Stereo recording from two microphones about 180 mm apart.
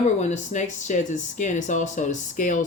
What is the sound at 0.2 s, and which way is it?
Speech, 40° left (ahead or behind).